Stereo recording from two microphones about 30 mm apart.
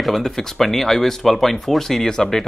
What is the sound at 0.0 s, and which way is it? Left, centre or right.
Speech, centre.